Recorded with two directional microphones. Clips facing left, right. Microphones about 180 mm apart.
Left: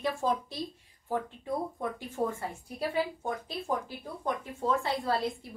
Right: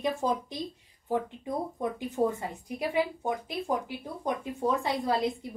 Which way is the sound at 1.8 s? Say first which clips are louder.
Right 4 dB; 15° right (ahead or behind).